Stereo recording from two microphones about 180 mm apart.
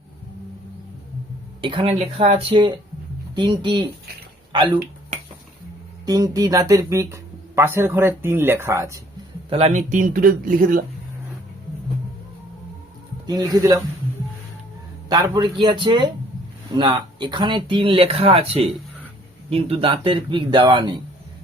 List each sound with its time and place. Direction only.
1.6 s speech: 30° right (ahead or behind)
6.1 s speech: 20° right (ahead or behind)
9.5 s speech: 35° right (ahead or behind); by 10.8 s 50° right (ahead or behind)
13.2 s speech: 20° right (ahead or behind)
15.1 s speech: 20° right (ahead or behind)